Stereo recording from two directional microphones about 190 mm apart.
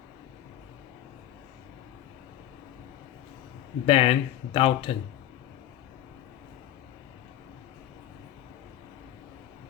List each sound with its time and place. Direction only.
3.8 s speech: 30° left (ahead or behind)